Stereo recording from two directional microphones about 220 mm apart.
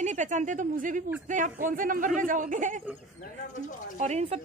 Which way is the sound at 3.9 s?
30° right (ahead or behind).